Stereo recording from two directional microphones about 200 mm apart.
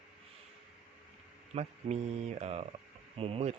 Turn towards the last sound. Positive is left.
turn(degrees=-30)  # may be behind; listen again after turning